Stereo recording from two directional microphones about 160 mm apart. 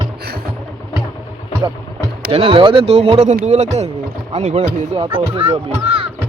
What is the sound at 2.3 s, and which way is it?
Speech, 35° right (ahead or behind).